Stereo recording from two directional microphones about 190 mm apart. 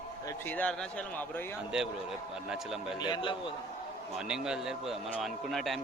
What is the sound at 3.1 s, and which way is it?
Speech, 25° left (ahead or behind).